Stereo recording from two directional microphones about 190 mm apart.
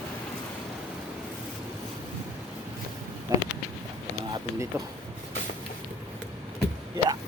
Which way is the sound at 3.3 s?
15° right (ahead or behind).